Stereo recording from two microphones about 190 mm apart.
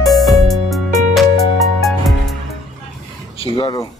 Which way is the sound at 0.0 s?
Centre (ahead or behind).